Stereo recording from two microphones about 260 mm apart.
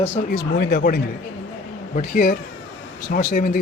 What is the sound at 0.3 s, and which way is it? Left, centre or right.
Speech, left.